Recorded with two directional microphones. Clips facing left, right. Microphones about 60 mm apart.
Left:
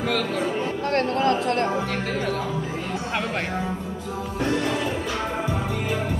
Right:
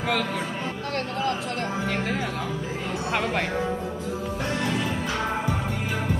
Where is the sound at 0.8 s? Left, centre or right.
Left.